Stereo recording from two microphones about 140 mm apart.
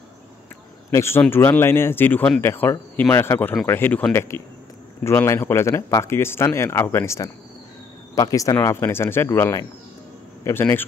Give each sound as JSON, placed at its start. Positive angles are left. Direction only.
{"t": 0.9, "sound": "speech", "side_deg": 20}